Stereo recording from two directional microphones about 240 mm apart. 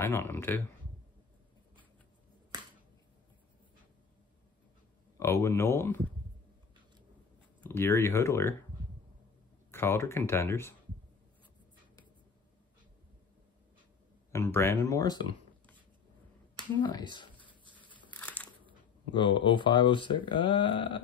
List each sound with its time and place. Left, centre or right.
0.0 s speech: centre
5.2 s speech: centre
7.6 s speech: centre
9.7 s speech: centre
14.3 s speech: centre
16.8 s speech: centre
17.7 s a sound: centre
19.1 s speech: centre